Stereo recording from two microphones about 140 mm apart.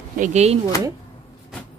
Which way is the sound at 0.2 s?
50° right (ahead or behind).